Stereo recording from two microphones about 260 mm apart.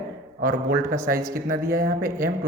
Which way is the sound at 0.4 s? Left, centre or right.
Right.